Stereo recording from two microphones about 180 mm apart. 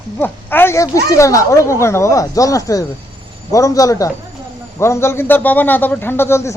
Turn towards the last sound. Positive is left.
turn(degrees=15)  # may be behind; listen again after turning